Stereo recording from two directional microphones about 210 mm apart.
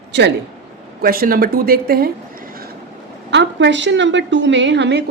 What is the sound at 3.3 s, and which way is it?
A woman's voice, 60° right (ahead or behind).